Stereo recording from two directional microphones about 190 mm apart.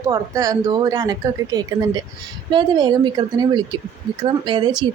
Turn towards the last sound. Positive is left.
turn(degrees=-25)  # may be behind; listen again after turning